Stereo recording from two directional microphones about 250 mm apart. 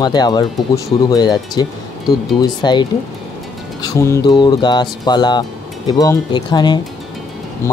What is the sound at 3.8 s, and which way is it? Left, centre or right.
Speech, centre.